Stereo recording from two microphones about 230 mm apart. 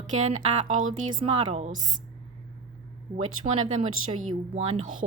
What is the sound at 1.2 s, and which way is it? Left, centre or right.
Speech, right.